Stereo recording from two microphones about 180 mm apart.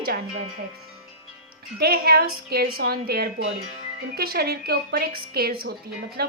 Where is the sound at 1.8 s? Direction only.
60° right (ahead or behind).